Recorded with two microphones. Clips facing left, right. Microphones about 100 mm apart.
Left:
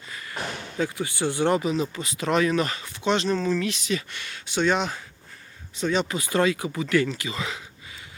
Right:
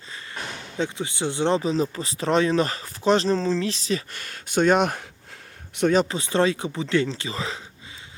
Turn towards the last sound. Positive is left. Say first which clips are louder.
# right 1 dB
turn(degrees=-35)  # may be behind; listen again after turning